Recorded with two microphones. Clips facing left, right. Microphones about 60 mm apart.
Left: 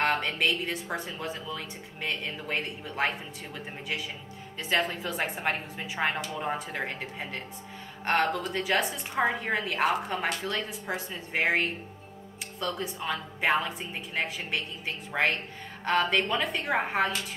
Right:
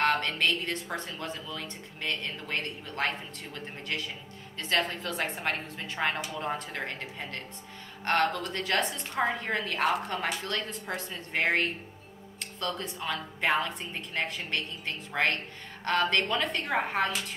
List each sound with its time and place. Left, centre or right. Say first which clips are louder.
0.0 s a woman's voice: even; centre